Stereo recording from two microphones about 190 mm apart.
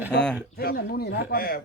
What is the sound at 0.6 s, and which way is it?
Speech, 55° left (ahead or behind).